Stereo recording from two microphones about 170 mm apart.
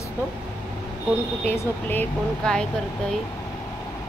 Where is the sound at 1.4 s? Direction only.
10° left (ahead or behind).